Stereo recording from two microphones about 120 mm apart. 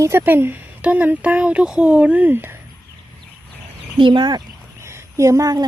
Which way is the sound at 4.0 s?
40° right (ahead or behind).